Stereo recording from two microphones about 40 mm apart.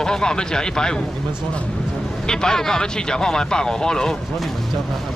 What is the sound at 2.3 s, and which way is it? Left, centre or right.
Speech, centre.